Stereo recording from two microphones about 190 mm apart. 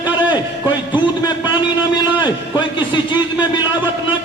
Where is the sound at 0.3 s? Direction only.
25° left (ahead or behind).